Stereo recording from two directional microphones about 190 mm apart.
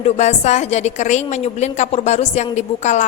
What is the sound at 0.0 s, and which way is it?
A woman's voice, 35° left (ahead or behind).